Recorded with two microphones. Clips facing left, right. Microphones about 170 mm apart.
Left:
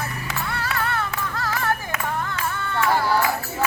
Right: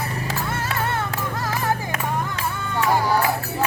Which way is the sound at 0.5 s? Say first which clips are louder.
Left 1 dB; 20° right (ahead or behind).